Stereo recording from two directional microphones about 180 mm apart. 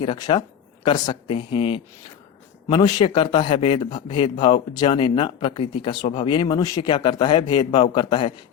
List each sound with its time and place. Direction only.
0.0 s a man's voice: 25° left (ahead or behind)